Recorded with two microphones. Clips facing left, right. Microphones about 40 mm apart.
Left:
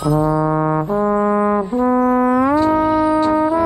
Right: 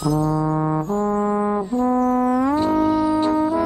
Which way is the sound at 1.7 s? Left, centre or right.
Centre.